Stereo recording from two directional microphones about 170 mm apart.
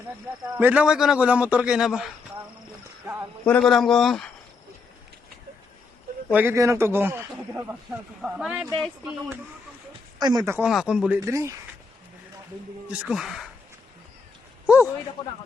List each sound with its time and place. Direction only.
0.5 s a man's voice: 10° right (ahead or behind)
3.4 s a man's voice: 5° left (ahead or behind)
6.3 s a man's voice: 15° right (ahead or behind); by 9.1 s centre (ahead or behind)
10.2 s speech: 25° right (ahead or behind)
10.5 s a man's voice: 5° right (ahead or behind)
11.3 s a man's voice: 20° right (ahead or behind)
12.9 s a man's voice: 5° right (ahead or behind)